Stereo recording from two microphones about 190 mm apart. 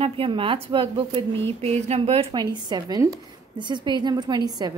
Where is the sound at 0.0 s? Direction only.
25° right (ahead or behind).